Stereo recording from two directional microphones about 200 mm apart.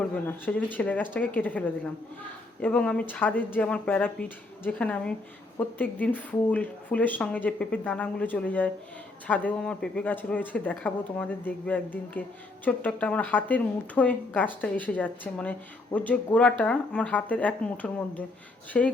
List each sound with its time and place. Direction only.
0.0 s a woman's voice: 10° left (ahead or behind)